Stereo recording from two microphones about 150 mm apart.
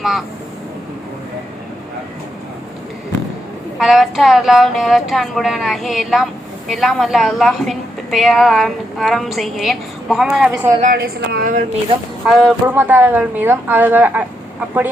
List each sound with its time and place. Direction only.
3.8 s a woman's voice: centre (ahead or behind)
10.5 s a woman's voice: 20° right (ahead or behind)
10.9 s speech: 90° right
12.2 s a woman's voice: centre (ahead or behind)
12.6 s speech: 10° right (ahead or behind)